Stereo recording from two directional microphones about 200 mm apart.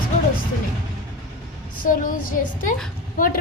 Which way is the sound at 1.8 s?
45° left (ahead or behind).